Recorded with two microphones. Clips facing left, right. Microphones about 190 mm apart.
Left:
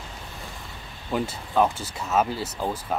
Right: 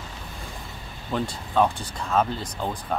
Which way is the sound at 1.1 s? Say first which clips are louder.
Even; 5° left (ahead or behind).